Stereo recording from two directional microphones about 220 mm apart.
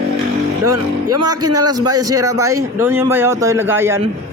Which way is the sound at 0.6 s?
90° right.